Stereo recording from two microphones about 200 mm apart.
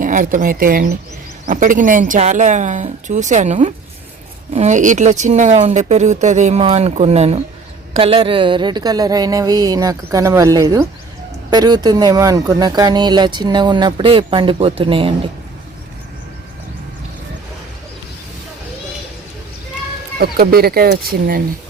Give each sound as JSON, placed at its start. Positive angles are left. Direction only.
{"t": 0.0, "sound": "speech", "side_deg": -40}
{"t": 20.1, "sound": "speech", "side_deg": -50}